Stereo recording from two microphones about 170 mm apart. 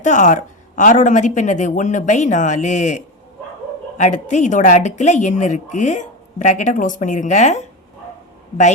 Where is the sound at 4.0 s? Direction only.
45° left (ahead or behind).